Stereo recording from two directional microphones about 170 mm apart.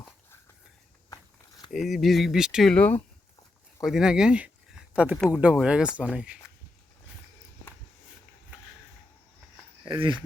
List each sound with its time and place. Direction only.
1.7 s speech: centre (ahead or behind)
3.8 s speech: 5° right (ahead or behind)
9.8 s speech: 25° right (ahead or behind)